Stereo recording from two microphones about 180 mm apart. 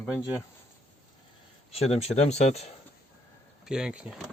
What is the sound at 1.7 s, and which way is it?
Speech, 35° left (ahead or behind).